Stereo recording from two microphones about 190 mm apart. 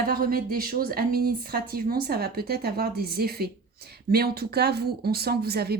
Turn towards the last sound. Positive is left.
turn(degrees=-55)  # may be behind; listen again after turning